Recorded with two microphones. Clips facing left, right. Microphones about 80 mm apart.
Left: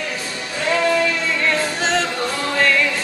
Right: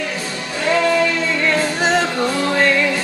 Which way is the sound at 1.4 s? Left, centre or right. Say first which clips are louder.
Right 3 dB; centre.